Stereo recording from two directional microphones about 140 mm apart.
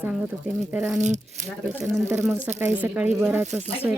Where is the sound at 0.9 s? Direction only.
55° right (ahead or behind).